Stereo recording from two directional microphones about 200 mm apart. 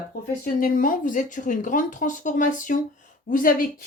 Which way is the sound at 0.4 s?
45° left (ahead or behind).